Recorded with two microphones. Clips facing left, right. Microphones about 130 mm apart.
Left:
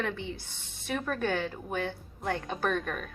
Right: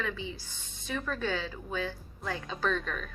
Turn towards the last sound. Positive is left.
turn(degrees=55)  # may be behind; listen again after turning